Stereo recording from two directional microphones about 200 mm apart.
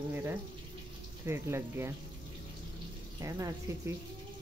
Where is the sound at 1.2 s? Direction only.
10° right (ahead or behind).